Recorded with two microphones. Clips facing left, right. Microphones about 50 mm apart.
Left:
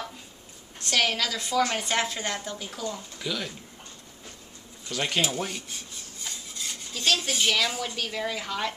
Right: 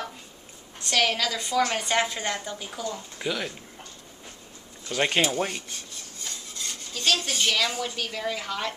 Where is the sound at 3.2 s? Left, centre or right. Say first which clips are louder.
Right 3 dB; right.